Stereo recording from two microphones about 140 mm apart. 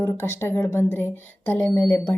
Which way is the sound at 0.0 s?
20° left (ahead or behind).